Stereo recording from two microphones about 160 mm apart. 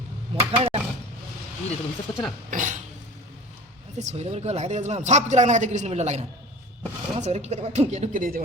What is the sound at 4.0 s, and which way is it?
A woman's voice, 45° right (ahead or behind).